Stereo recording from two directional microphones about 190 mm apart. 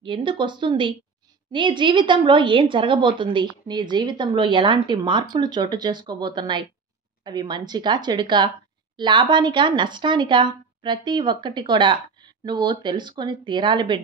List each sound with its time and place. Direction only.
0.0 s a woman's voice: 25° right (ahead or behind)